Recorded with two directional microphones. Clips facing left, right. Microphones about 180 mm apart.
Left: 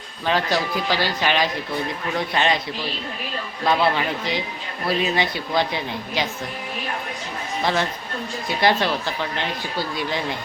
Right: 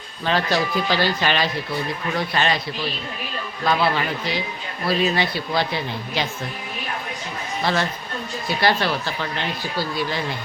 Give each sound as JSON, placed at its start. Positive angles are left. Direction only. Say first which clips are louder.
{"t": 0.3, "sound": "speech", "louder": "even", "side_deg": 10}
{"t": 3.6, "sound": "speech", "louder": "left 1 dB", "side_deg": 20}
{"t": 7.6, "sound": "speech", "louder": "even", "side_deg": 15}